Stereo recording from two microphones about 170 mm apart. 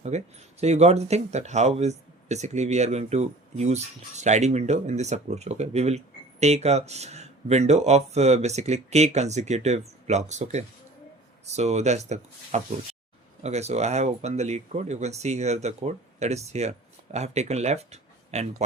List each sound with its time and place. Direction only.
0.1 s speech: 40° right (ahead or behind)